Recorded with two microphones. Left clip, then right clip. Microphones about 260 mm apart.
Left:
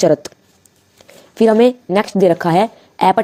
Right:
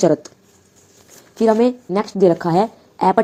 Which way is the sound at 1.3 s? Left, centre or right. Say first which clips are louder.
Left 4 dB; left.